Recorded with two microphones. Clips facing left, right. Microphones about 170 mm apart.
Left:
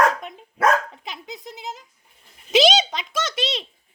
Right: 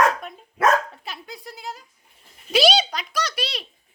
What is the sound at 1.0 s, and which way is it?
A child's voice, 20° left (ahead or behind).